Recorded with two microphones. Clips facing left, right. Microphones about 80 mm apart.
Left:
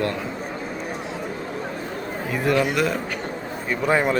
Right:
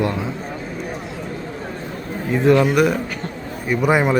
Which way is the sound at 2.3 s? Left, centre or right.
Right.